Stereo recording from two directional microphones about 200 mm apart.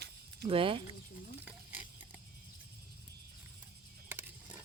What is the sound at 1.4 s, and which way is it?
Stir, 10° right (ahead or behind).